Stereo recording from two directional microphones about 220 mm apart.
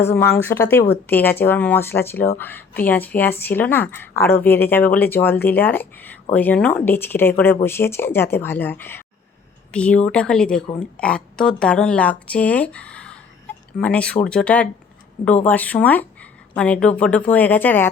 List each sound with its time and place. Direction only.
0.0 s speech: 10° left (ahead or behind)